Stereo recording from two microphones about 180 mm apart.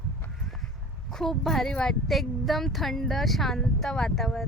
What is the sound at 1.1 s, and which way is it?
A woman's voice, centre (ahead or behind).